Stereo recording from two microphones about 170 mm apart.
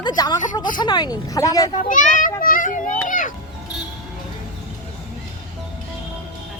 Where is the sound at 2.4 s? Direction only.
50° left (ahead or behind).